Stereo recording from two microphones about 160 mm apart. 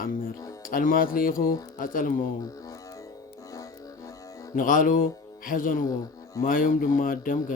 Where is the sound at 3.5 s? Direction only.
20° left (ahead or behind).